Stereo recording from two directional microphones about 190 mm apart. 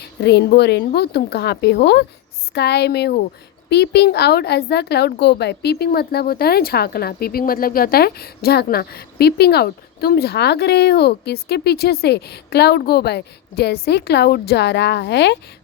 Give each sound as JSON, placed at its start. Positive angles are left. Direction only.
{"t": 0.0, "sound": "a woman's voice", "side_deg": 60}